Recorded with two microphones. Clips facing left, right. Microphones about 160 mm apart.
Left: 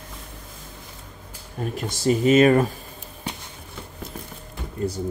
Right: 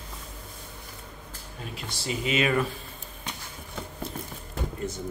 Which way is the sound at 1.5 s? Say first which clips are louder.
Left 10 dB; 45° left (ahead or behind).